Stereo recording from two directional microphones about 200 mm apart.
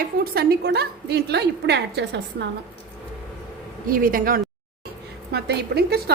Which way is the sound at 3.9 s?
45° right (ahead or behind).